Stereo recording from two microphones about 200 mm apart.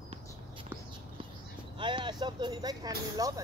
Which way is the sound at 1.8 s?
25° right (ahead or behind).